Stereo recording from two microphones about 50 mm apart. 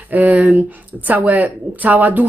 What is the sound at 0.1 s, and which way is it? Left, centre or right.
Speech, right.